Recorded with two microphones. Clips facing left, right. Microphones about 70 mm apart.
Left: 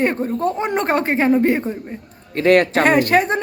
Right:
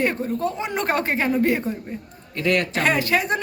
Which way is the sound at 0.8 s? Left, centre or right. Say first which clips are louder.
Left 4 dB; left.